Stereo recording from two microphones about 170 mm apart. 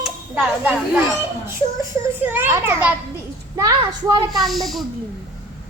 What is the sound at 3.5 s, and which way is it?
Speech, 20° right (ahead or behind).